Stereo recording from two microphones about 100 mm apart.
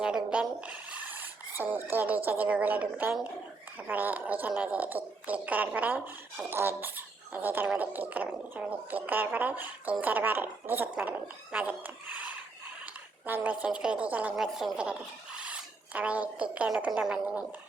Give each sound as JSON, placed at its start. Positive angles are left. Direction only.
{"t": 0.0, "sound": "a woman's voice", "side_deg": -10}